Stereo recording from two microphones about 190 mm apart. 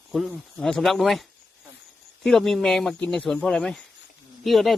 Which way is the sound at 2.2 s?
Centre (ahead or behind).